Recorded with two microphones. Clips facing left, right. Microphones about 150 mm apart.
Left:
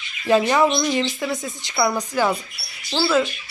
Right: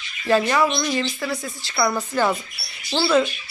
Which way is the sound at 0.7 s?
5° left (ahead or behind).